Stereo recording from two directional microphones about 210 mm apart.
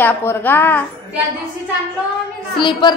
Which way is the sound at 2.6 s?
25° left (ahead or behind).